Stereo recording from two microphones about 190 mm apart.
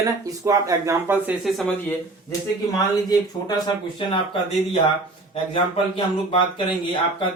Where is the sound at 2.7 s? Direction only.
20° left (ahead or behind).